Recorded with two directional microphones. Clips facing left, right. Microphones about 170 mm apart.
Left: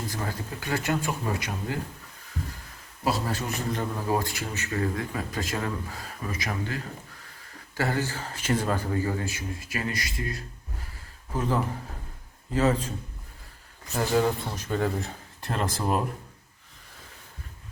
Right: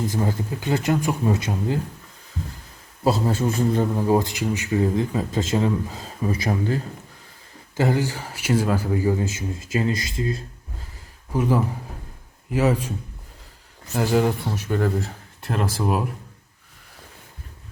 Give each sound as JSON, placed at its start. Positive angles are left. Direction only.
{"t": 0.1, "sound": "speech", "side_deg": -20}
{"t": 3.0, "sound": "speech", "side_deg": -25}
{"t": 7.8, "sound": "a man's voice", "side_deg": -15}
{"t": 11.3, "sound": "a man's voice", "side_deg": -10}
{"t": 13.9, "sound": "a man's voice", "side_deg": -10}